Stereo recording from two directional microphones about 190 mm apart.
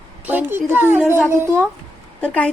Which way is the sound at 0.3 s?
10° right (ahead or behind).